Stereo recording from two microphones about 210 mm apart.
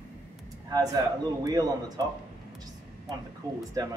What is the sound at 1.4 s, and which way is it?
Speech, 20° right (ahead or behind).